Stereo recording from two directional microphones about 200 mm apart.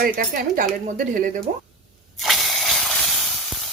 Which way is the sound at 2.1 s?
Centre (ahead or behind).